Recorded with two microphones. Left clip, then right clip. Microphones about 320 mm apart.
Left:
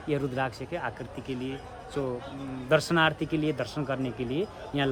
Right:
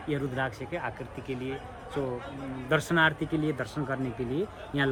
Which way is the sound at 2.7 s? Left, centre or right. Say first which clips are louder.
Left 1 dB; left.